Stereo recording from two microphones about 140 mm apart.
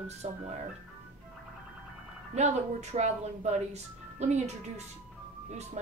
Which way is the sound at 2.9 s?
55° right (ahead or behind).